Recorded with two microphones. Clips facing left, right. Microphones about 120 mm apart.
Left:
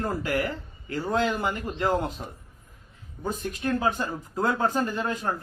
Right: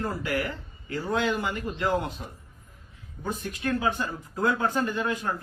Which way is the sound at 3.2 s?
40° left (ahead or behind).